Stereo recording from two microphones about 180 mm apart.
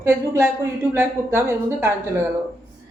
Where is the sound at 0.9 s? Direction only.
15° right (ahead or behind).